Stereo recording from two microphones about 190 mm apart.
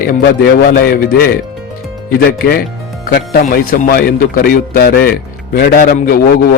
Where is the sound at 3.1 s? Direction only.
55° left (ahead or behind).